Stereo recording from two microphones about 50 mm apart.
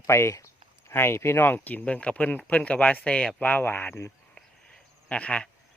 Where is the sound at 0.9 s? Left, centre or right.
Left.